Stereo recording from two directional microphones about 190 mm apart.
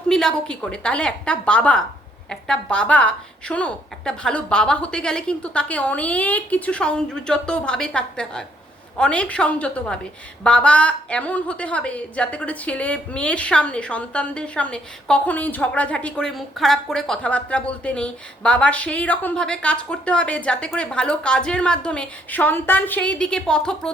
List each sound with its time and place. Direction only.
0.1 s a woman's voice: 5° left (ahead or behind)